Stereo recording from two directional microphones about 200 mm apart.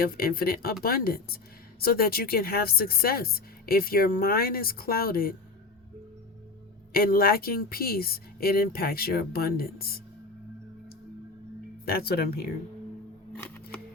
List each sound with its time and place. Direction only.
0.0 s a woman's voice: 50° left (ahead or behind)
6.9 s a woman's voice: 45° left (ahead or behind)
11.9 s a woman's voice: 50° left (ahead or behind)
13.3 s scissors: 10° left (ahead or behind)